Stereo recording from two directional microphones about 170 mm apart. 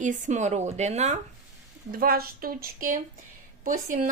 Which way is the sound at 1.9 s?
60° right (ahead or behind).